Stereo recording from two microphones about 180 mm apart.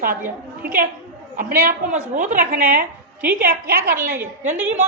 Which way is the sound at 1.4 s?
55° right (ahead or behind).